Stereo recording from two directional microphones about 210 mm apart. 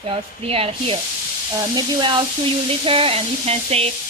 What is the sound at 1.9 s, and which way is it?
Sizzle, 20° right (ahead or behind).